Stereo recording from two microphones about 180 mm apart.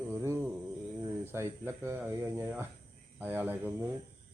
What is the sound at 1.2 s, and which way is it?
Speech, 15° right (ahead or behind).